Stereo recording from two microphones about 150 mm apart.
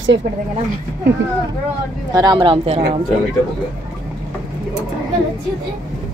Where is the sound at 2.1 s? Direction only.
25° right (ahead or behind).